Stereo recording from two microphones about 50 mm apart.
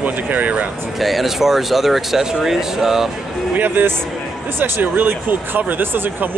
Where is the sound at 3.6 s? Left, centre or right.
Right.